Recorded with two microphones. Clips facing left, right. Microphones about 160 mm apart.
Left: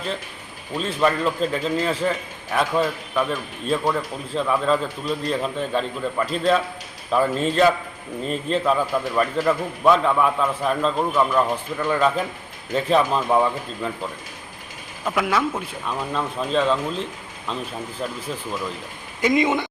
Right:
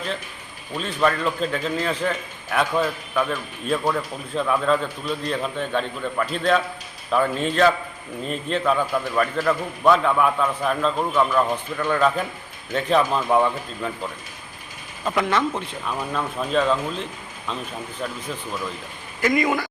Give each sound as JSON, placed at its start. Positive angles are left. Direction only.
{"t": 0.8, "sound": "a man's voice", "side_deg": 5}
{"t": 15.0, "sound": "a man's voice", "side_deg": 5}
{"t": 19.2, "sound": "speech", "side_deg": 20}